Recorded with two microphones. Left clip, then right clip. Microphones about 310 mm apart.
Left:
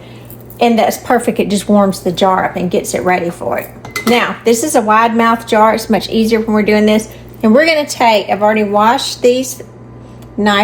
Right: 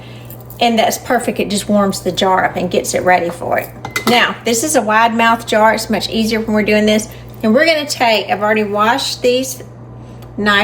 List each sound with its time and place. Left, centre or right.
0.6 s a woman's voice: centre